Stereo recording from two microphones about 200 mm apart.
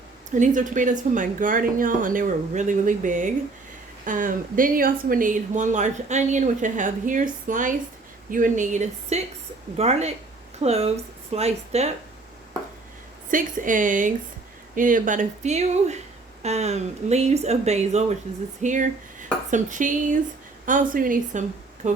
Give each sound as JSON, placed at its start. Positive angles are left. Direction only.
{"t": 0.3, "sound": "speech", "side_deg": -40}
{"t": 13.3, "sound": "a woman's voice", "side_deg": -40}